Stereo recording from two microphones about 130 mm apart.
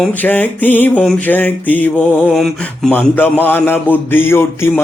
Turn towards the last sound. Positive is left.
turn(degrees=20)  # may be behind; listen again after turning